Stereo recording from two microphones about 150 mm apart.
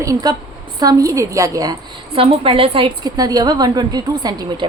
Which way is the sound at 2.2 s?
35° right (ahead or behind).